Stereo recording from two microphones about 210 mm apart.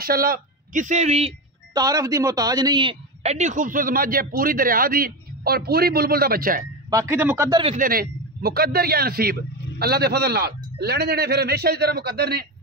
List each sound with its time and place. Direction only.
0.0 s speech: 45° right (ahead or behind)
1.7 s speech: 15° right (ahead or behind); by 6.6 s 45° right (ahead or behind)
6.9 s speech: 15° right (ahead or behind)
7.6 s speech: 40° right (ahead or behind)